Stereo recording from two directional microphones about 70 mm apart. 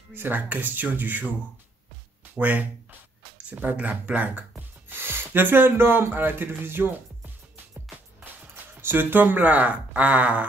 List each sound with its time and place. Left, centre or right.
0.1 s speech: right
2.3 s speech: right
8.8 s speech: right